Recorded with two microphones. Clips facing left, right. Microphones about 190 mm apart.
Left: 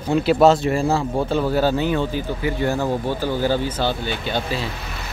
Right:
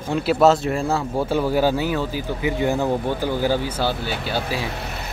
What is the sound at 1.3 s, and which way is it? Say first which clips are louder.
Speech: right 1 dB; 10° right (ahead or behind).